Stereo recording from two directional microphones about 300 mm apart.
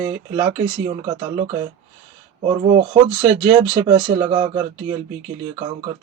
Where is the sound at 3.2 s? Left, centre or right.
Centre.